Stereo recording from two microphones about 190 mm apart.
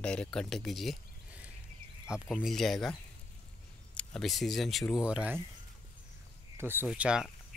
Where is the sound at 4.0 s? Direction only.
Centre (ahead or behind).